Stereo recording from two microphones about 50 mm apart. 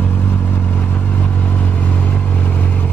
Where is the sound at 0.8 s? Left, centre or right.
Left.